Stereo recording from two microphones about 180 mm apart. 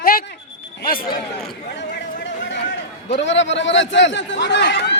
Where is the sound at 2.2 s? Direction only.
90° left.